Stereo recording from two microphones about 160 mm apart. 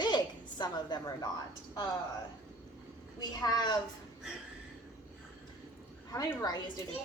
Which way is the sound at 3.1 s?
25° left (ahead or behind).